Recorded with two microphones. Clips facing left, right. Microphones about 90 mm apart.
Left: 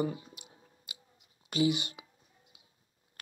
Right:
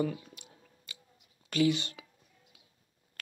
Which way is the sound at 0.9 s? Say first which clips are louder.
Even; 10° left (ahead or behind).